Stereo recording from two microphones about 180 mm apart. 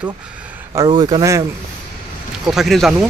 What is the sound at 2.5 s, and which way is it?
Speech, centre (ahead or behind).